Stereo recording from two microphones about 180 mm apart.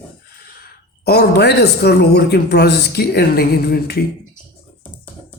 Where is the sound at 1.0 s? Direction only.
65° left (ahead or behind).